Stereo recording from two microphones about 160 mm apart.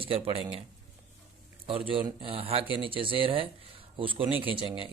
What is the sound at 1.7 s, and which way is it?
Speech, 35° right (ahead or behind).